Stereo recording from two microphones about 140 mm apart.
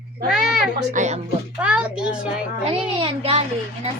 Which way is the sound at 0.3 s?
5° right (ahead or behind).